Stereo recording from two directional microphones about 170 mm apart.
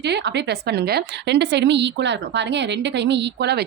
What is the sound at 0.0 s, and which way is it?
A woman's voice, 80° right.